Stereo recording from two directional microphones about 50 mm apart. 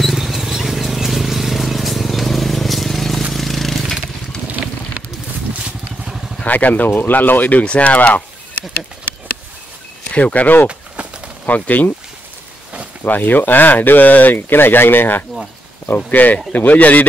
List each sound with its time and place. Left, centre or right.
0.0 s a sound: centre
6.4 s speech: left
10.1 s speech: left
10.7 s a sound: right
11.4 s speech: left
13.0 s speech: left